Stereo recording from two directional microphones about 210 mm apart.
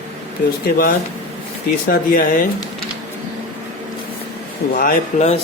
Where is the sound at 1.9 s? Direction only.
40° left (ahead or behind).